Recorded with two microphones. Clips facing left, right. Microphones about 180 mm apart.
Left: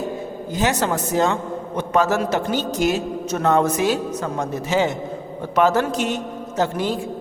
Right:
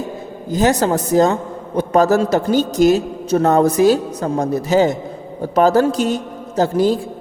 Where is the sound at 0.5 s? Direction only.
40° right (ahead or behind).